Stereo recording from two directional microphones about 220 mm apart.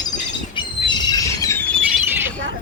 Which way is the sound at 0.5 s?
20° left (ahead or behind).